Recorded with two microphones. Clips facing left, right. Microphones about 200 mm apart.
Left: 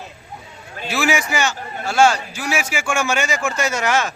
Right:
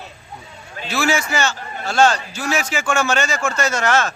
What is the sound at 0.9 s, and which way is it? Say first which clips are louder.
A man's voice: even; 15° left (ahead or behind).